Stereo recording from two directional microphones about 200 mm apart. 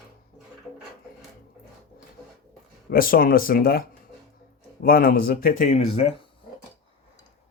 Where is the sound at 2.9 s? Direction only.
45° left (ahead or behind).